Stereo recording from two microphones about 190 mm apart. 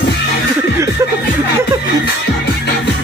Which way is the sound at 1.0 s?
15° right (ahead or behind).